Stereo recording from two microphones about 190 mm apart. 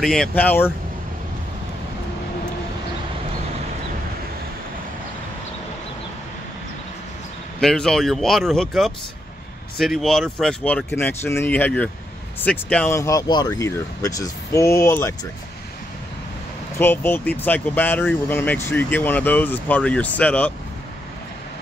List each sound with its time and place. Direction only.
0.0 s speech: centre (ahead or behind)
7.6 s speech: 5° left (ahead or behind)
16.7 s speech: 10° left (ahead or behind)